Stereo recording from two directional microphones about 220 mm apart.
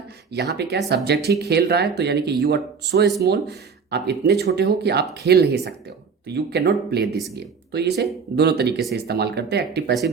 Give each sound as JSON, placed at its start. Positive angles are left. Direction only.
{"t": 0.3, "sound": "speech", "side_deg": -50}
{"t": 7.0, "sound": "speech", "side_deg": 0}
{"t": 7.3, "sound": "speech", "side_deg": -50}